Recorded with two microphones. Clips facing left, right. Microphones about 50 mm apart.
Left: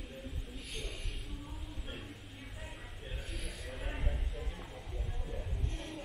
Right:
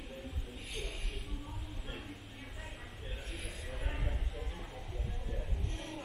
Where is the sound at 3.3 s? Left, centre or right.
Centre.